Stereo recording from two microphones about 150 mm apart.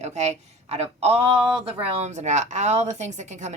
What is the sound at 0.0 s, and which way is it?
A woman's voice, 50° right (ahead or behind).